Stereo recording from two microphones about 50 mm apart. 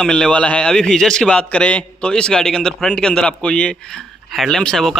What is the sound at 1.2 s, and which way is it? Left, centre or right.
A man's voice, left.